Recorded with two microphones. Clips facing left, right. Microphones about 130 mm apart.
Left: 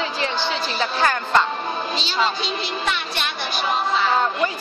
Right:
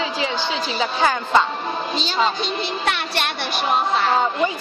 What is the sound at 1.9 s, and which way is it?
Speech, 45° right (ahead or behind).